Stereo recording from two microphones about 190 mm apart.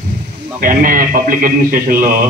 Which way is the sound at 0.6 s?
45° right (ahead or behind).